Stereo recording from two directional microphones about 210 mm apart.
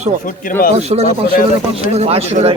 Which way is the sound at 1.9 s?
30° right (ahead or behind).